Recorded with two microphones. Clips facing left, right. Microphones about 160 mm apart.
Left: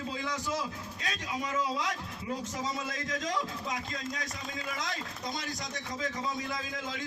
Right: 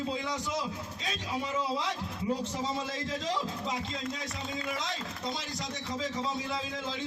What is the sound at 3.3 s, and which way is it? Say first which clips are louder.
Speech: right 2 dB; 30° right (ahead or behind).